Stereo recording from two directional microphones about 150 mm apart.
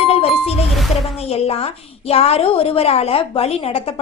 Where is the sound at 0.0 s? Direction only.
40° left (ahead or behind).